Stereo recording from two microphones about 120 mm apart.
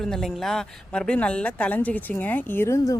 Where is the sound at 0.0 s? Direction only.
5° left (ahead or behind).